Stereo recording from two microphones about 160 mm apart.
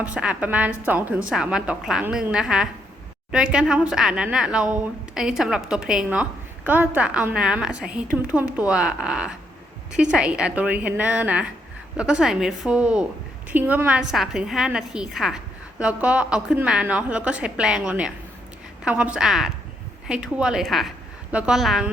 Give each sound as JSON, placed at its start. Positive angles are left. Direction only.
{"t": 0.0, "sound": "a woman's voice", "side_deg": -5}